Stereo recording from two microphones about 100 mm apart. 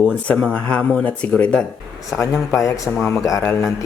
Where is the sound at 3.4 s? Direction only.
20° left (ahead or behind).